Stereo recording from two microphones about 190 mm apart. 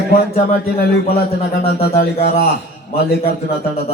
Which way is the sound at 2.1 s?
35° left (ahead or behind).